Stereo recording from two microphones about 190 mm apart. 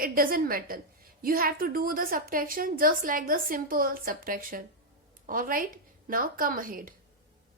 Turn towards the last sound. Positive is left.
turn(degrees=-45)  # may be behind; listen again after turning